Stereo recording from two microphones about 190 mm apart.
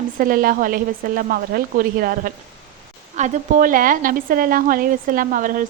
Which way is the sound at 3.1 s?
40° right (ahead or behind).